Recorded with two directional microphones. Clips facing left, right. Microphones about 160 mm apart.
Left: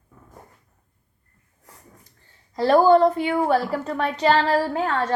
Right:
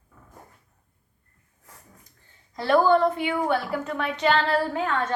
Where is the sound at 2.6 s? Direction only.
35° left (ahead or behind).